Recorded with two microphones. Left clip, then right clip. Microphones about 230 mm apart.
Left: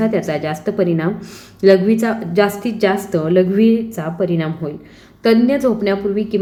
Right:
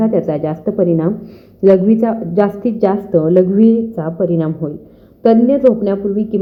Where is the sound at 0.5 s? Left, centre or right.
Centre.